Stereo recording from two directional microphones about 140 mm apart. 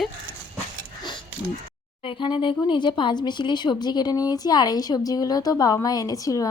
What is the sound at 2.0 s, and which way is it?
Speech, 35° left (ahead or behind).